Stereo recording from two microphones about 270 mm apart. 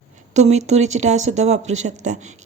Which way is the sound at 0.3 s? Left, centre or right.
Right.